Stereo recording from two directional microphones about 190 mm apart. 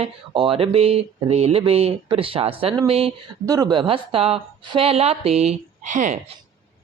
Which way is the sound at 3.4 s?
20° right (ahead or behind).